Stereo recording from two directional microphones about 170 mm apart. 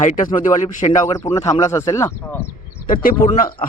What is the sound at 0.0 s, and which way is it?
Speech, 50° left (ahead or behind).